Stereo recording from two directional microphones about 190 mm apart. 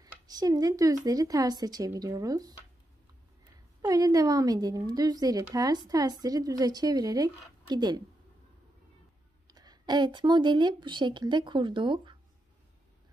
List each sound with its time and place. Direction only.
0.0 s a woman's voice: 20° right (ahead or behind)
3.8 s a woman's voice: 20° right (ahead or behind)
9.5 s a woman's voice: 20° right (ahead or behind)